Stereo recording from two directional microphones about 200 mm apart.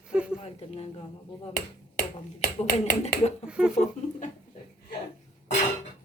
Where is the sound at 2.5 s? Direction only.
35° left (ahead or behind).